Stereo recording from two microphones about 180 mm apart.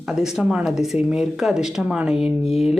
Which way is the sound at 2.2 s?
35° left (ahead or behind).